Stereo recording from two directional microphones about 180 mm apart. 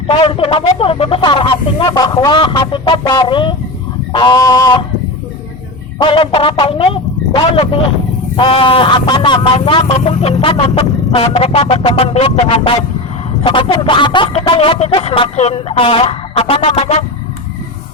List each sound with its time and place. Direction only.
0.1 s speech: 30° left (ahead or behind)
6.0 s music: 30° left (ahead or behind)
8.4 s speech: 30° left (ahead or behind)
10.1 s music: 35° left (ahead or behind)